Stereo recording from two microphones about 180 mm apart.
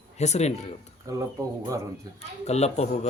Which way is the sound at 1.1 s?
20° right (ahead or behind).